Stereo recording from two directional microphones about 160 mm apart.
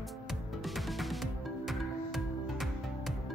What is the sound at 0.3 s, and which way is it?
Music, centre (ahead or behind).